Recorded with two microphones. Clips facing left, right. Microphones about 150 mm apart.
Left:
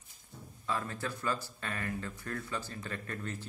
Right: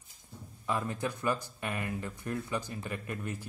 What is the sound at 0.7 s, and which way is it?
Speech, 15° right (ahead or behind).